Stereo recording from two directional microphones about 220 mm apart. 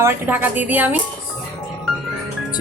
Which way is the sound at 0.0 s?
10° right (ahead or behind).